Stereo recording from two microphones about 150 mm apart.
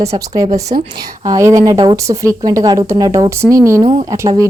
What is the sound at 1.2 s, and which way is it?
A woman's voice, 25° right (ahead or behind).